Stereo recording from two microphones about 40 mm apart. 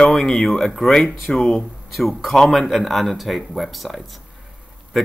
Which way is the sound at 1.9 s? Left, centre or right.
Centre.